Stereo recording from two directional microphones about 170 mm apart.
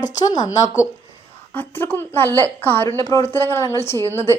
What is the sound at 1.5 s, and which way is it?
A woman's voice, 10° left (ahead or behind).